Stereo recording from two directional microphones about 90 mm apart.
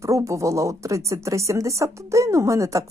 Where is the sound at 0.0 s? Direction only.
35° right (ahead or behind).